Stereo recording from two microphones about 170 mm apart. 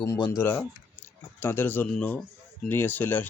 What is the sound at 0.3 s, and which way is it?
A man's voice, 15° left (ahead or behind).